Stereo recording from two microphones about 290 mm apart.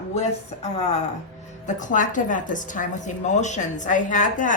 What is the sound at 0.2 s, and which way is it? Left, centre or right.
A woman's voice, left.